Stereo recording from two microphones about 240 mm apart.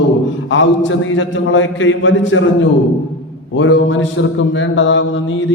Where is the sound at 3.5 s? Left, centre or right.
Left.